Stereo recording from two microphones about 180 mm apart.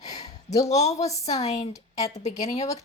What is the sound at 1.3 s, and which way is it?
Speech, 40° left (ahead or behind).